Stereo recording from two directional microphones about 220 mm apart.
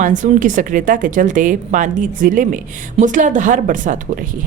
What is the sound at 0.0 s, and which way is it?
A woman's voice, 35° right (ahead or behind).